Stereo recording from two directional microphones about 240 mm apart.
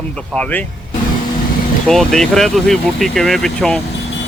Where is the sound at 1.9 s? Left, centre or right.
Centre.